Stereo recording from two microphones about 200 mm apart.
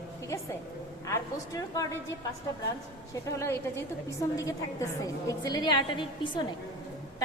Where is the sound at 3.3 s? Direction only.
15° left (ahead or behind).